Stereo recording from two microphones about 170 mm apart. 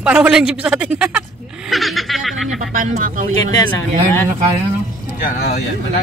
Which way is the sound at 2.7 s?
50° right (ahead or behind).